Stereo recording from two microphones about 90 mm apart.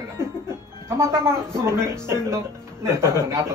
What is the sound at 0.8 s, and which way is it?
A man's voice, 30° right (ahead or behind).